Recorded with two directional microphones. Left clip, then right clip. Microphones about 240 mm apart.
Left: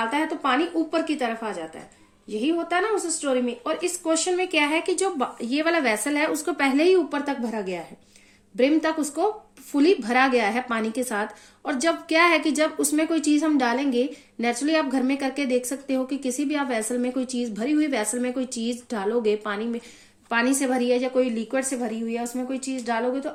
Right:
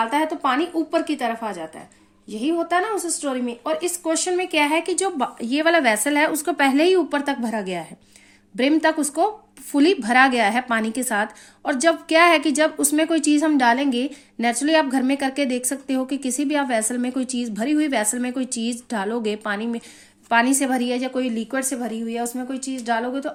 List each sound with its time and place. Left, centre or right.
0.0 s a woman's voice: right